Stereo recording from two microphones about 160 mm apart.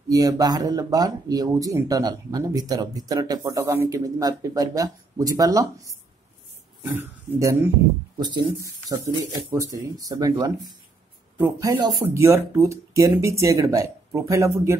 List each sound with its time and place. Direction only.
0.1 s speech: 20° right (ahead or behind)
8.2 s speech: 25° right (ahead or behind)
11.3 s speech: 15° right (ahead or behind)